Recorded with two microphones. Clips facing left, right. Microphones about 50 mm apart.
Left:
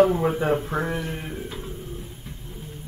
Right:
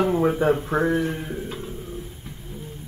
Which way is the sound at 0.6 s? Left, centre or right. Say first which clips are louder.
Right 4 dB; right.